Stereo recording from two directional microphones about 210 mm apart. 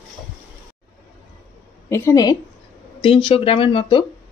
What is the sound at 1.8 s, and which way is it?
A woman's voice, 15° left (ahead or behind).